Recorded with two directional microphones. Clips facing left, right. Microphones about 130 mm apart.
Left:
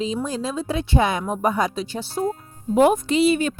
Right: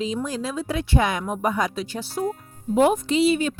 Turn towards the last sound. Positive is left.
turn(degrees=50)  # may be behind; listen again after turning